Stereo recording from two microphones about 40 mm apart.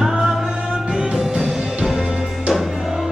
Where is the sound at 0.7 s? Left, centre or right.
Centre.